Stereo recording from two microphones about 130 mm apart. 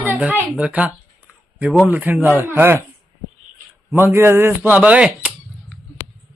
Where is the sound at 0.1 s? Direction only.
10° right (ahead or behind).